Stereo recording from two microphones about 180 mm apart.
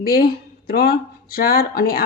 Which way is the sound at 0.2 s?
60° left (ahead or behind).